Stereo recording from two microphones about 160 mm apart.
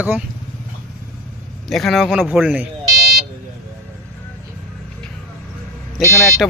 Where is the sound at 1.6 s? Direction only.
Centre (ahead or behind).